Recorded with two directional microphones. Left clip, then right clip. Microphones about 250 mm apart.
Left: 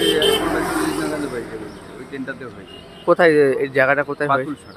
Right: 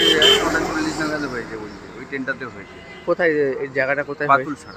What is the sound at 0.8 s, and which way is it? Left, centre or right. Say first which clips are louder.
Speech: left 1 dB; left.